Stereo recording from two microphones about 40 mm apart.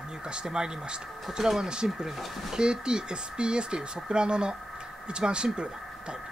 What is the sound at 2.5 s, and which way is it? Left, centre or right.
Speech, right.